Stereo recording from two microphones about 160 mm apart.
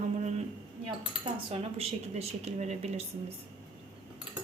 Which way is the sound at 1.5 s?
40° right (ahead or behind).